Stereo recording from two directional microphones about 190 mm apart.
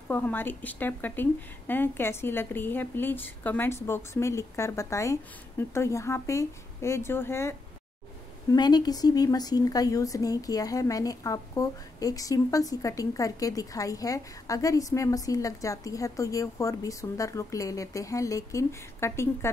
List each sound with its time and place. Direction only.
0.1 s a woman's voice: 10° left (ahead or behind)